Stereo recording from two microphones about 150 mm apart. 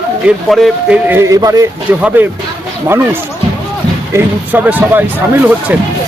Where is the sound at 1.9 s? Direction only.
10° right (ahead or behind).